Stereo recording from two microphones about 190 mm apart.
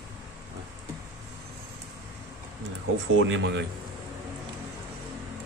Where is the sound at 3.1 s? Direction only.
80° right.